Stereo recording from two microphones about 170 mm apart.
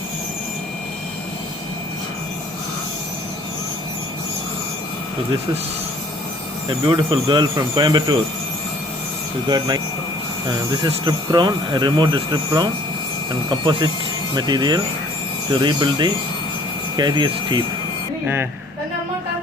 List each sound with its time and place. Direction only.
6.7 s speech: 30° right (ahead or behind)
9.5 s speech: 25° right (ahead or behind)
10.8 s speech: 25° right (ahead or behind)